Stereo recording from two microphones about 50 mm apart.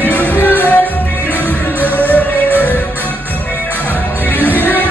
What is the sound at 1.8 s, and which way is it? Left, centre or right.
Music, left.